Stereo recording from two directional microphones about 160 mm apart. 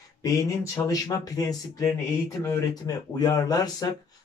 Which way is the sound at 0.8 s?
25° left (ahead or behind).